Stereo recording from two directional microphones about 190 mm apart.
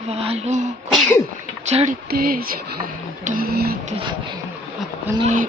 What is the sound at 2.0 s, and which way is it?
Music, 50° right (ahead or behind).